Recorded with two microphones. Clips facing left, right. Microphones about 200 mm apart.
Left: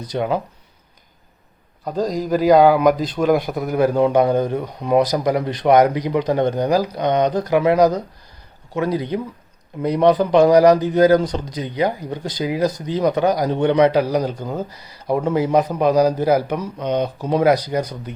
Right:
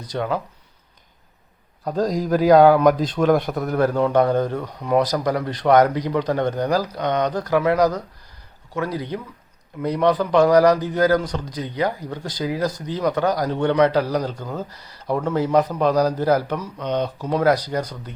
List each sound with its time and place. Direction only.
0.1 s speech: 20° left (ahead or behind)
1.8 s a man's voice: centre (ahead or behind)